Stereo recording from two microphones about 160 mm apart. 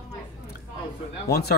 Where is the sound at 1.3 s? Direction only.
80° left.